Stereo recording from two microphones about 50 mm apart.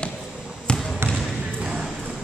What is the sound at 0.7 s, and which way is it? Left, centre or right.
Trickle, centre.